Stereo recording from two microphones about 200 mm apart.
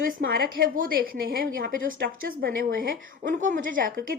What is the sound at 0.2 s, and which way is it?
A woman's voice, 45° right (ahead or behind).